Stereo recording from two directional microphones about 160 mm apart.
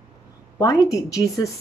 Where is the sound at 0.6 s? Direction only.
20° left (ahead or behind).